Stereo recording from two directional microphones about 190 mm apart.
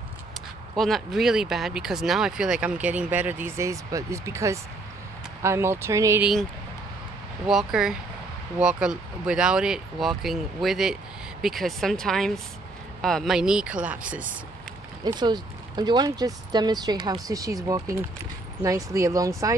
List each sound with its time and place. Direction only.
0.7 s speech: centre (ahead or behind); by 6.2 s 15° right (ahead or behind)
7.4 s speech: 5° right (ahead or behind)
15.0 s speech: 20° right (ahead or behind)